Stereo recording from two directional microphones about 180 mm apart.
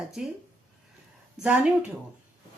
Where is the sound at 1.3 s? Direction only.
5° right (ahead or behind).